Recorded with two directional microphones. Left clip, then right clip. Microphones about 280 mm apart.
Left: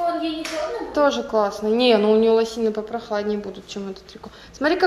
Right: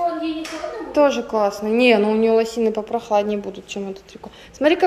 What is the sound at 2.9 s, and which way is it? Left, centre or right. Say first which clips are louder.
Speech: right 6 dB; centre.